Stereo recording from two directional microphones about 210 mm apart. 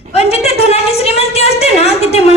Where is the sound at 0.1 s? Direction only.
30° left (ahead or behind).